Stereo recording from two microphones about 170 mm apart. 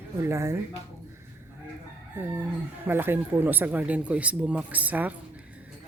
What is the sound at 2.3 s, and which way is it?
Speech, 10° right (ahead or behind).